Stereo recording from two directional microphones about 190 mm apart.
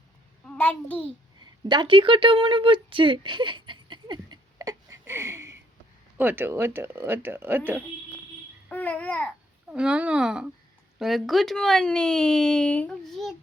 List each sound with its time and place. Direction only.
0.4 s a child's voice: 5° left (ahead or behind)
1.4 s a sound: 25° right (ahead or behind)
6.1 s speech: 10° right (ahead or behind)
8.7 s babbling: 10° left (ahead or behind)
9.6 s speech: 5° right (ahead or behind)